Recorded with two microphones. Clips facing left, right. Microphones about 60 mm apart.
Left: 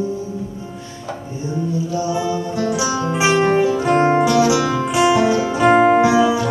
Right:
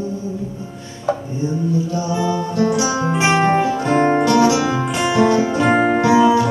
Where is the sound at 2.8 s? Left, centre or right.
Right.